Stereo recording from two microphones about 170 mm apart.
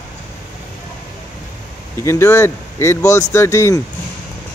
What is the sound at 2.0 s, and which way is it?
Speech, 15° left (ahead or behind).